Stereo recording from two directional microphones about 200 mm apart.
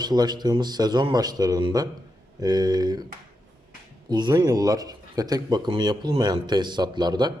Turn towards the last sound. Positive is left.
turn(degrees=-20)  # may be behind; listen again after turning